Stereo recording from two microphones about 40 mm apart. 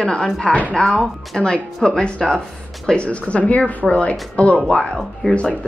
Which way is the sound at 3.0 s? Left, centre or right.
Left.